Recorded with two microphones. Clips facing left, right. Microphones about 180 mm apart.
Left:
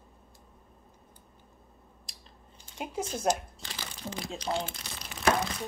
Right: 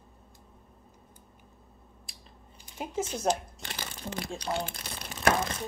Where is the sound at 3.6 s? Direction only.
55° right (ahead or behind).